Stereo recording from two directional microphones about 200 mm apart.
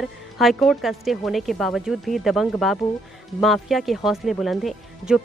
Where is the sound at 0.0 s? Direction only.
Centre (ahead or behind).